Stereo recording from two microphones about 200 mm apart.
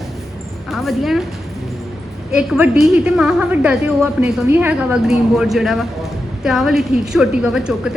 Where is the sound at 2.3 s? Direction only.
5° right (ahead or behind).